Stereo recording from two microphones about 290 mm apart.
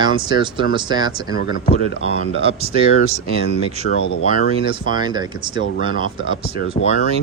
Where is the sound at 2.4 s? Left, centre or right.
Right.